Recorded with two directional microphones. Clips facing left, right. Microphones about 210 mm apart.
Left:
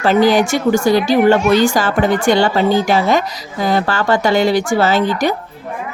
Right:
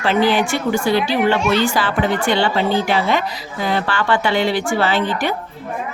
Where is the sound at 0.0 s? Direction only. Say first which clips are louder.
Left 4 dB; 40° left (ahead or behind).